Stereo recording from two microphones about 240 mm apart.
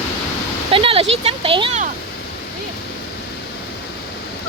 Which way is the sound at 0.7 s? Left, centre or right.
Right.